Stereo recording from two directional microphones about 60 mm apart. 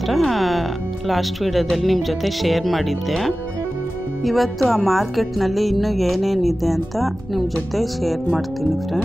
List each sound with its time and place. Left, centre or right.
0.1 s speech: centre